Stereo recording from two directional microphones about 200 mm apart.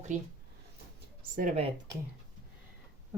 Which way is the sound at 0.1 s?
40° right (ahead or behind).